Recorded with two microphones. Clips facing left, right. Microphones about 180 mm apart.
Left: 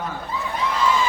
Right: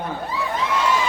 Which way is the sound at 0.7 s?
70° right (ahead or behind).